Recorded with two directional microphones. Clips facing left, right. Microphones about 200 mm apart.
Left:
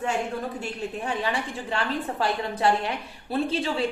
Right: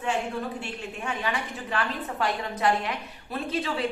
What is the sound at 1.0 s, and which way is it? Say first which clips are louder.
A man's voice: left 1 dB; 30° left (ahead or behind).